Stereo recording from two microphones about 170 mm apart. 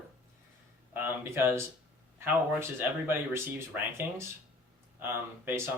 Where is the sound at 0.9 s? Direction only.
15° right (ahead or behind).